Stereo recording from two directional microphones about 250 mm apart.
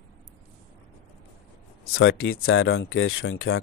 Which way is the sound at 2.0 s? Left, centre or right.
Left.